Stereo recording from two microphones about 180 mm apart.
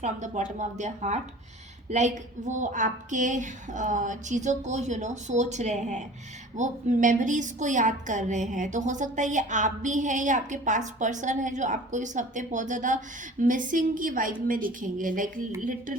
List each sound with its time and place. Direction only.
0.0 s a woman's voice: 45° right (ahead or behind)